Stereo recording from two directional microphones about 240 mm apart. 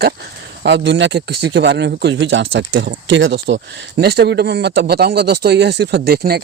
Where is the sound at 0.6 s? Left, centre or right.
Right.